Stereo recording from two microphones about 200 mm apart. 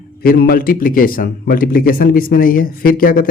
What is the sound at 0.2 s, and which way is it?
A man's voice, 50° left (ahead or behind).